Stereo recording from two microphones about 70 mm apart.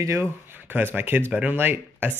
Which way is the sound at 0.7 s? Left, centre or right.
Right.